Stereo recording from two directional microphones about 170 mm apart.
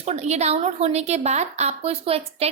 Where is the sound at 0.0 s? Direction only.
40° right (ahead or behind).